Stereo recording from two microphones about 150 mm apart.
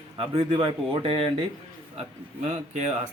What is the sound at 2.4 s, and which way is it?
Speech, 50° right (ahead or behind).